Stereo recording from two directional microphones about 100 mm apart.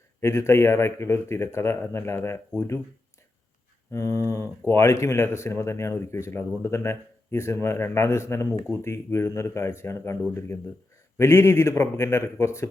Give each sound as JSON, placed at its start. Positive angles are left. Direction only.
{"t": 0.2, "sound": "speech", "side_deg": 25}
{"t": 3.9, "sound": "speech", "side_deg": 30}